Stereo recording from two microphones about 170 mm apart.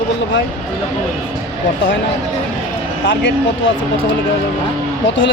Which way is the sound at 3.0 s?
90° left.